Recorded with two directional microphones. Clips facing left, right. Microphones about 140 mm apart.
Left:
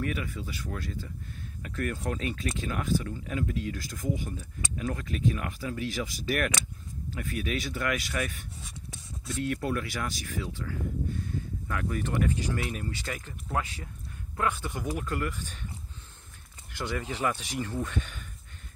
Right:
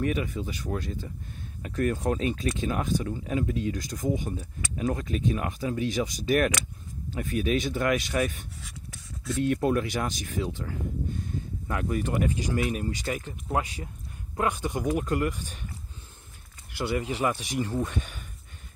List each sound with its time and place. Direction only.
0.0 s speech: 25° right (ahead or behind)
8.6 s a sound: 25° left (ahead or behind)
9.4 s speech: 25° right (ahead or behind)
16.7 s speech: 10° right (ahead or behind)